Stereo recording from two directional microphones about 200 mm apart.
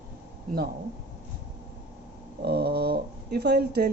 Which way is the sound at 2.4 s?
50° right (ahead or behind).